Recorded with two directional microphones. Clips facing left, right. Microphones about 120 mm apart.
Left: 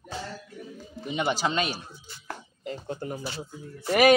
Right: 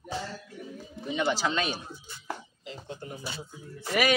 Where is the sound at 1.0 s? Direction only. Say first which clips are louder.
Left 1 dB; 20° left (ahead or behind).